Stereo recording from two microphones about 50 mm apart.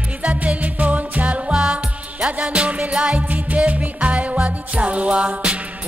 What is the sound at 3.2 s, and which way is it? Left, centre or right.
Music, right.